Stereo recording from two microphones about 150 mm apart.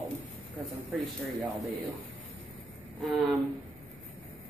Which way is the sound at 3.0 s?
Centre (ahead or behind).